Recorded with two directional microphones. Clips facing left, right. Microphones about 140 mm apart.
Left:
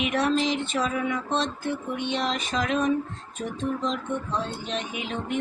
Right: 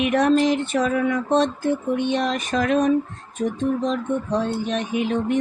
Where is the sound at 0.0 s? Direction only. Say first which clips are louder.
Right 6 dB; 50° right (ahead or behind).